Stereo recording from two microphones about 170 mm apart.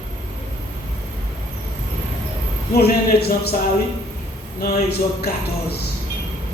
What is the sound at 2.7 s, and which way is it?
Speech, 70° left (ahead or behind).